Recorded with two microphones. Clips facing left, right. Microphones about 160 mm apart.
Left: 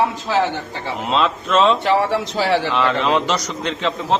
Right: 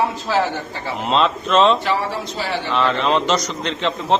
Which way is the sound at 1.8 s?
65° left (ahead or behind).